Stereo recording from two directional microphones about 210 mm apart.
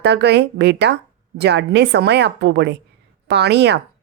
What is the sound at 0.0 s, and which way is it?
Speech, 55° right (ahead or behind).